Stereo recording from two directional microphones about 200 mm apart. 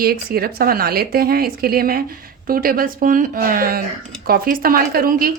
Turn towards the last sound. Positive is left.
turn(degrees=-45)  # may be behind; listen again after turning